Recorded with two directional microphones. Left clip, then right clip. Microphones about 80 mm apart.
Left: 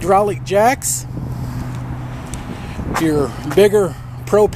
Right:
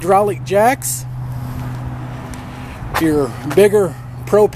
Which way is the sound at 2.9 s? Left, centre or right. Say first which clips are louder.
Right 1 dB; centre.